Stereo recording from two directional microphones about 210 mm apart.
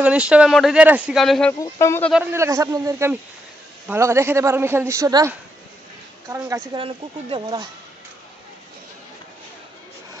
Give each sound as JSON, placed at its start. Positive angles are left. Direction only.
{"t": 0.0, "sound": "speech", "side_deg": -5}
{"t": 1.6, "sound": "speech", "side_deg": 15}
{"t": 2.1, "sound": "a man's voice", "side_deg": -15}